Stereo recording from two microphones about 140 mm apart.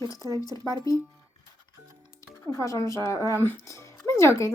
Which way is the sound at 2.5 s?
25° left (ahead or behind).